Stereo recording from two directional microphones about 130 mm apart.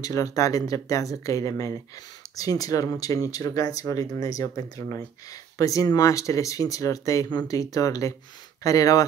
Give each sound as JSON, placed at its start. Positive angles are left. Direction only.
{"t": 0.0, "sound": "speech", "side_deg": 25}